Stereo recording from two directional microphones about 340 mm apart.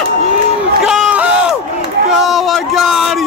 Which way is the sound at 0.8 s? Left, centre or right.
Centre.